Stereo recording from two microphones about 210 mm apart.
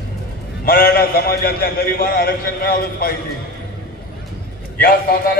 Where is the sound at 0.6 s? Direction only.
45° left (ahead or behind).